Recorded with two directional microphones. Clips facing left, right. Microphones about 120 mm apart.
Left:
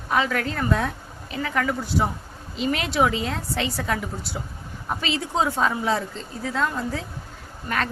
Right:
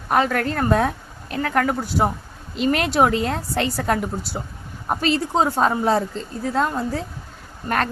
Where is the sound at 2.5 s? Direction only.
60° right (ahead or behind).